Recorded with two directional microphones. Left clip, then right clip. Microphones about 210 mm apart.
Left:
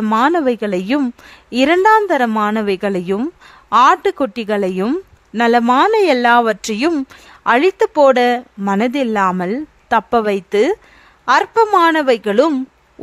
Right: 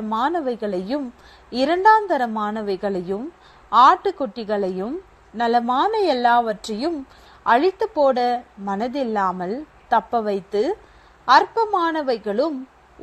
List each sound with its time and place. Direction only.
0.2 s speech: 35° left (ahead or behind)